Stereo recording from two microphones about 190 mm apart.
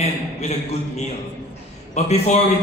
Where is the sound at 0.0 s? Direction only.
35° left (ahead or behind).